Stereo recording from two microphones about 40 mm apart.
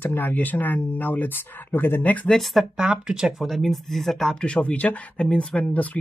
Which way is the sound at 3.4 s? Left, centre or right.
Centre.